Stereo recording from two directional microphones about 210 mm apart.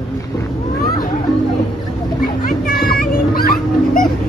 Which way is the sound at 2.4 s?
40° left (ahead or behind).